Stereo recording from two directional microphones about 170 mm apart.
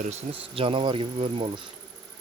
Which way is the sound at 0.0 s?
40° right (ahead or behind).